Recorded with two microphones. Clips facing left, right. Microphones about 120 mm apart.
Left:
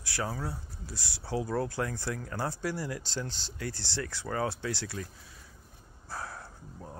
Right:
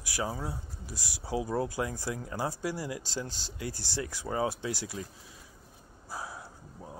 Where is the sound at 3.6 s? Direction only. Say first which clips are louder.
Even; 15° right (ahead or behind).